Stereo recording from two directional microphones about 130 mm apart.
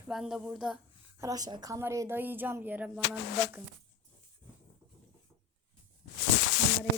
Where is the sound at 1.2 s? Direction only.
25° right (ahead or behind).